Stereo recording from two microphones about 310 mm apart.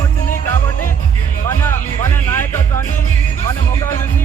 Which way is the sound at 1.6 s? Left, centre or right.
Centre.